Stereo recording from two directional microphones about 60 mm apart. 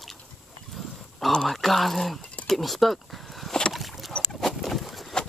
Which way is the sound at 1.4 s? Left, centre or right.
Centre.